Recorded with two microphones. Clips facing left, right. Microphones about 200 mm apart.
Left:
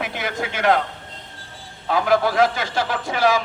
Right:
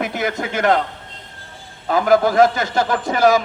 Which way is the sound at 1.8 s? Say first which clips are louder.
Right 4 dB; 45° right (ahead or behind).